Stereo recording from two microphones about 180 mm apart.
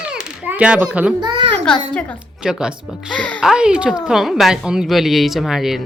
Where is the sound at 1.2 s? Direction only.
25° right (ahead or behind).